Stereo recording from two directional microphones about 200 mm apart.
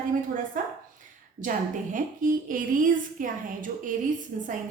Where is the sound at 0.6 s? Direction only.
40° right (ahead or behind).